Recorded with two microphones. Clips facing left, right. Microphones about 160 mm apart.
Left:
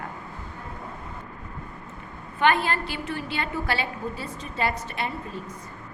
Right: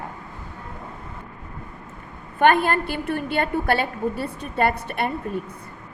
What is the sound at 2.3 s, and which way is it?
A woman's voice, 50° right (ahead or behind).